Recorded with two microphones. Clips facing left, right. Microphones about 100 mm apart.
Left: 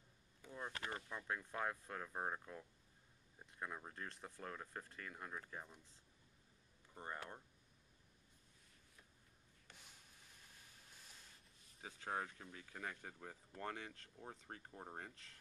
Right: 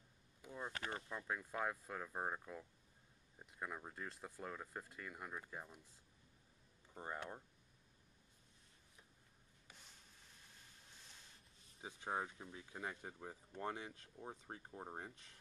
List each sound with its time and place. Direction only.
0.4 s a sound: 10° right (ahead or behind)
1.0 s speech: 5° right (ahead or behind)
6.9 s speech: 15° right (ahead or behind)
11.8 s speech: 20° right (ahead or behind)